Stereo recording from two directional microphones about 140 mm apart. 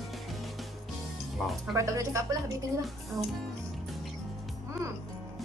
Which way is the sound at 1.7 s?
25° right (ahead or behind).